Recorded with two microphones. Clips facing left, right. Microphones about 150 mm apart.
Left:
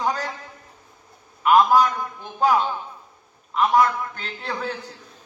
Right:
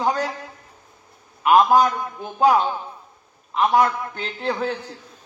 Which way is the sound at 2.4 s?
40° right (ahead or behind).